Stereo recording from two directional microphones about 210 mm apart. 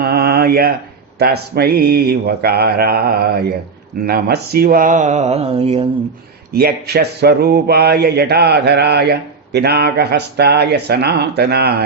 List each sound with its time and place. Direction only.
0.0 s mantra: 50° right (ahead or behind)
1.2 s speech: 50° right (ahead or behind); by 5.9 s 30° right (ahead or behind)
6.5 s speech: 50° right (ahead or behind)